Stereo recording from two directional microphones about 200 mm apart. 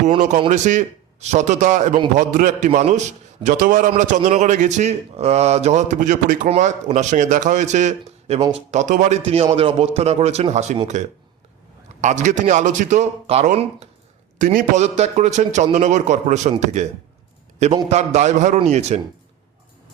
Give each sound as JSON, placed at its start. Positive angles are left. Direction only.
{"t": 0.0, "sound": "a man's voice", "side_deg": -35}
{"t": 0.3, "sound": "speech", "side_deg": -25}
{"t": 0.6, "sound": "a man's voice", "side_deg": -35}
{"t": 8.4, "sound": "speech", "side_deg": -20}
{"t": 8.7, "sound": "a man's voice", "side_deg": -35}
{"t": 11.9, "sound": "a man's voice", "side_deg": -35}